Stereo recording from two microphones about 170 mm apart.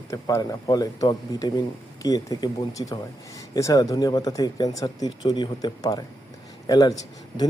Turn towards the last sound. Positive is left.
turn(degrees=25)  # may be behind; listen again after turning